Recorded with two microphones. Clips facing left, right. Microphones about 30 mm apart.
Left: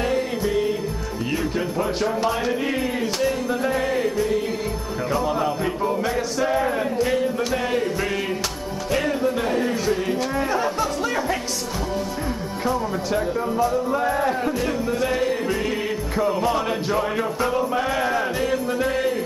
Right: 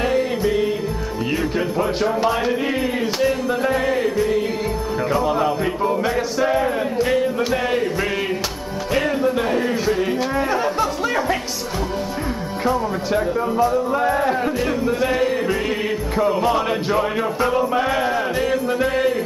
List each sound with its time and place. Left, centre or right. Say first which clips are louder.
0.0 s music: right 3 dB; centre
1.8 s music: right 3 dB; centre
8.9 s speech: right 3 dB; centre
12.6 s music: right 3 dB; centre